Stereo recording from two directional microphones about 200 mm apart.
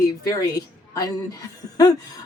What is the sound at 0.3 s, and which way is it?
A woman's voice, 20° left (ahead or behind).